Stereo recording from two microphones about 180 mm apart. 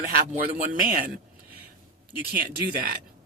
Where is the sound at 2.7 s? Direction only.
60° right (ahead or behind).